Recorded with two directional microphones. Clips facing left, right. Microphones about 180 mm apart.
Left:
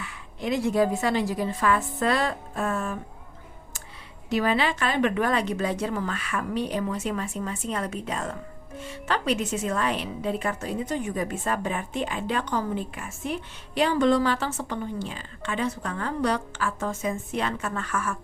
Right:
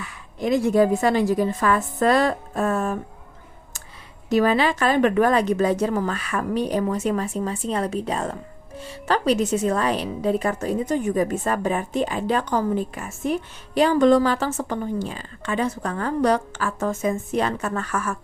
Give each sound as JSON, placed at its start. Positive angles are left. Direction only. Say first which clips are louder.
{"t": 0.0, "sound": "speech", "louder": "right 5 dB", "side_deg": -45}
{"t": 4.3, "sound": "speech", "louder": "right 5 dB", "side_deg": -45}